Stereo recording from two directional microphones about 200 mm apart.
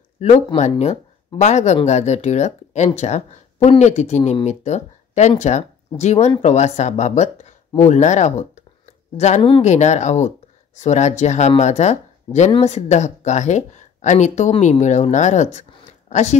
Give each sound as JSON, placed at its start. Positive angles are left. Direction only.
{"t": 0.2, "sound": "speech", "side_deg": 35}